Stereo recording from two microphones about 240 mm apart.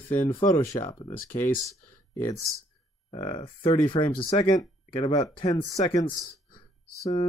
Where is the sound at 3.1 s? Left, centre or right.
Left.